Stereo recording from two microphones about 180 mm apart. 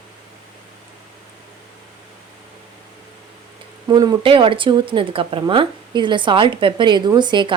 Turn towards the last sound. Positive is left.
turn(degrees=-25)  # may be behind; listen again after turning